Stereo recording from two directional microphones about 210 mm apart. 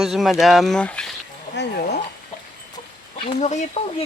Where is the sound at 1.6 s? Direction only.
50° left (ahead or behind).